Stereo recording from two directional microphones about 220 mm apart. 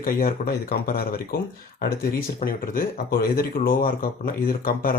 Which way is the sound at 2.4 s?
40° left (ahead or behind).